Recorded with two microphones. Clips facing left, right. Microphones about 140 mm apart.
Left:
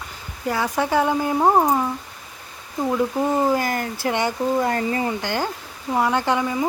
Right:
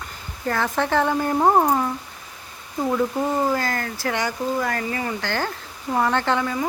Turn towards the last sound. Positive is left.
turn(degrees=15)  # may be behind; listen again after turning